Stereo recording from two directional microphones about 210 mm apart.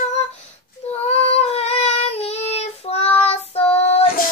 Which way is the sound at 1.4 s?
30° left (ahead or behind).